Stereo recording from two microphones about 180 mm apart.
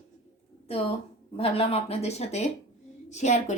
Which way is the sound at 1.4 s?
30° left (ahead or behind).